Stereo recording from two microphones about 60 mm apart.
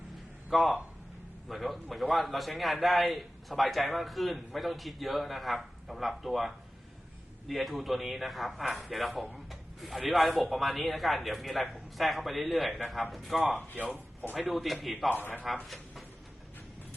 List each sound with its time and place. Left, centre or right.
0.5 s a man's voice: centre
15.1 s a man's voice: left
15.6 s speech: centre